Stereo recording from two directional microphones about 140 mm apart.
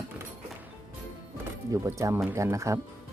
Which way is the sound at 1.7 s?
25° right (ahead or behind).